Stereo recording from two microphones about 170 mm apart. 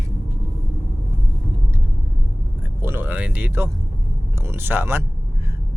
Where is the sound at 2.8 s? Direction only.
10° right (ahead or behind).